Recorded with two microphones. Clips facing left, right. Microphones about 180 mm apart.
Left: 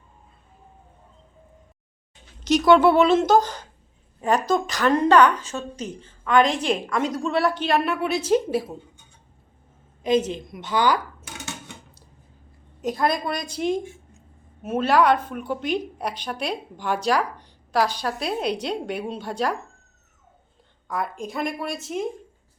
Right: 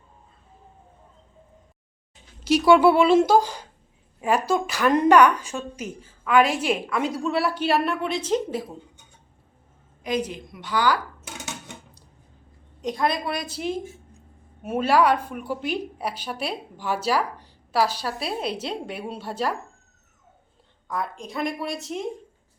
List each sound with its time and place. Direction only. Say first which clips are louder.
2.4 s a woman's voice: even; 5° right (ahead or behind)
7.9 s a woman's voice: left 3 dB; 10° left (ahead or behind)
10.0 s speech: left 5 dB; 25° left (ahead or behind)
12.8 s a woman's voice: left 2 dB; centre (ahead or behind)
20.8 s a woman's voice: left 2 dB; centre (ahead or behind)